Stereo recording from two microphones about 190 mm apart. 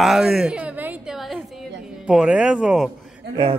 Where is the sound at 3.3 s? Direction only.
25° right (ahead or behind).